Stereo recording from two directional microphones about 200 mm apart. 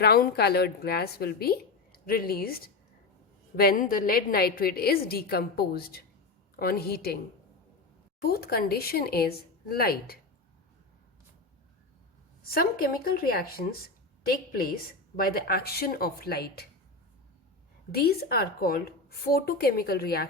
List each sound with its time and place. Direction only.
0.0 s a woman's voice: 50° left (ahead or behind)
8.2 s a woman's voice: 50° left (ahead or behind)
12.5 s a woman's voice: 50° left (ahead or behind)
17.9 s a woman's voice: 50° left (ahead or behind)